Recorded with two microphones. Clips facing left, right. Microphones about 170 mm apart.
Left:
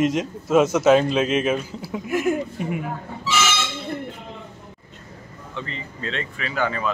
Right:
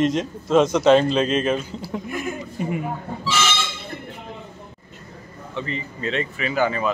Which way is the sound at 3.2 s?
5° left (ahead or behind).